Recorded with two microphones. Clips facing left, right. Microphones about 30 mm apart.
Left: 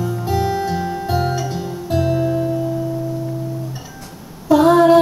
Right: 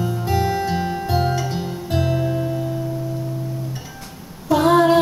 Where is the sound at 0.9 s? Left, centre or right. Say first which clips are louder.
Left 1 dB; centre.